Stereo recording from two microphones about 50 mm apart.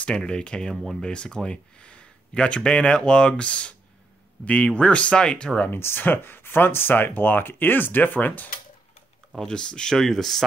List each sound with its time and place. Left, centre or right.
0.2 s speech: centre
5.7 s speech: left
9.3 s speech: centre